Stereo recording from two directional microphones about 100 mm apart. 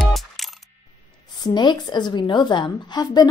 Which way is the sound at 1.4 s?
45° left (ahead or behind).